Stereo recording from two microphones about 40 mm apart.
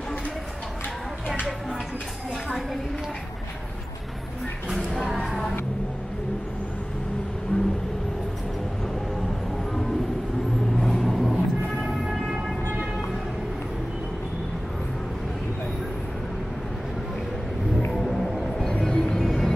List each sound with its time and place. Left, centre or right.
5.2 s music: centre
7.5 s vehicle: left
10.8 s vehicle: centre
17.9 s music: centre
18.6 s music: centre
19.2 s music: centre